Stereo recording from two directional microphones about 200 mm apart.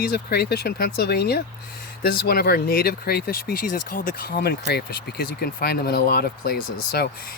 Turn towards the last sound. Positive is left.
turn(degrees=50)  # may be behind; listen again after turning